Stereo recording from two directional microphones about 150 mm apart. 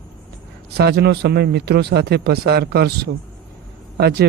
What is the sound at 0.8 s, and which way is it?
Speech, 90° right.